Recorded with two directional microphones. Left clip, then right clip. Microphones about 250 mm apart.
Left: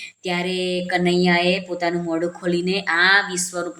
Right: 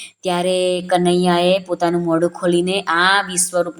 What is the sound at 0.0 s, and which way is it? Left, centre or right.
Speech, right.